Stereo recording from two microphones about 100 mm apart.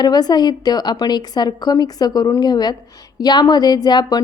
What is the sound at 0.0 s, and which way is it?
A woman's voice, 45° left (ahead or behind).